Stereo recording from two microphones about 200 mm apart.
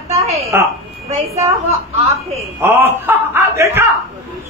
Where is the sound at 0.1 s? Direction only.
30° right (ahead or behind).